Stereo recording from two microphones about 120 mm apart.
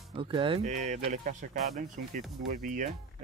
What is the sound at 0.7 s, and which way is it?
Speech, 90° right.